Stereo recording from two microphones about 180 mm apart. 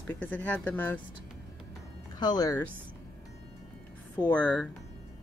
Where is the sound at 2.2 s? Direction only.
20° left (ahead or behind).